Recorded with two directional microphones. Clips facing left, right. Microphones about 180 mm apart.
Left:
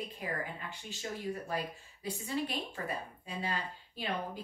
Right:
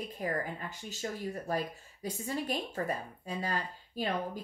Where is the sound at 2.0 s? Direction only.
45° right (ahead or behind).